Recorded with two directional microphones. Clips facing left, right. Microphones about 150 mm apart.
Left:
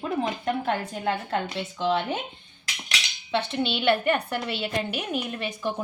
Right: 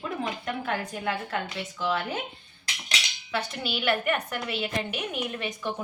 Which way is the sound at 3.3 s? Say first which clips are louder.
Left 5 dB; 25° left (ahead or behind).